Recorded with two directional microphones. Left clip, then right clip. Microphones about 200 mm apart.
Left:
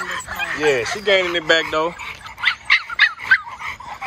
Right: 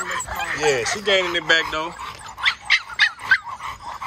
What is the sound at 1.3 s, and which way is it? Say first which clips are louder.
Speech: left 2 dB; 5° right (ahead or behind).